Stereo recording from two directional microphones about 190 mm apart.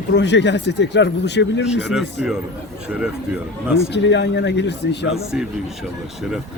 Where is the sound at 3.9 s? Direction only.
65° left (ahead or behind).